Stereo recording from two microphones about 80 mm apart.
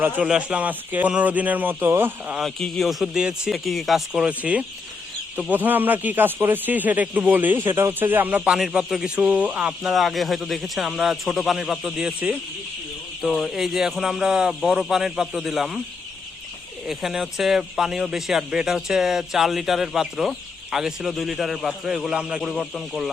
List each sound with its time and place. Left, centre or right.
0.3 s a man's voice: centre; by 2.3 s right
2.4 s a man's voice: centre; by 8.4 s right
8.4 s speech: centre
9.9 s a man's voice: centre
11.9 s speech: centre
13.2 s a man's voice: centre
16.8 s a man's voice: centre